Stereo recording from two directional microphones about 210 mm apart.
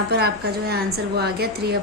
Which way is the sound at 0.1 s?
50° right (ahead or behind).